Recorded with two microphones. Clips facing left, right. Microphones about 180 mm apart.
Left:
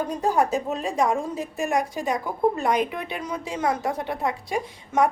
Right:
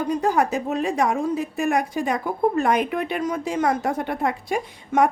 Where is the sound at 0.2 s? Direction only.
70° right (ahead or behind).